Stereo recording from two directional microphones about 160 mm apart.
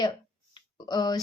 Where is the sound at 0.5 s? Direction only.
25° left (ahead or behind).